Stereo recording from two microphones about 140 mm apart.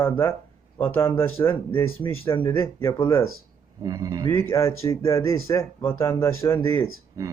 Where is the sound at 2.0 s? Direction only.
35° left (ahead or behind).